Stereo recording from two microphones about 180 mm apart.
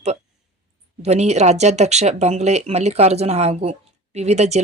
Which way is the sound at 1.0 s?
40° right (ahead or behind).